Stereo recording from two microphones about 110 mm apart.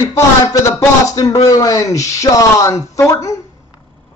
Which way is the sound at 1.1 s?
30° left (ahead or behind).